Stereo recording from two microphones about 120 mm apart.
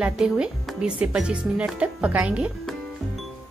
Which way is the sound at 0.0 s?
10° right (ahead or behind).